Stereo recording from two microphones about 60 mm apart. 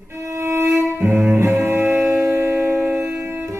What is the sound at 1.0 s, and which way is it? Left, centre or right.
Music, right.